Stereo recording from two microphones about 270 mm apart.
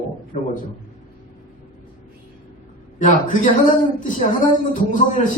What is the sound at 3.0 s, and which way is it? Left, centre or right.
A man's voice, left.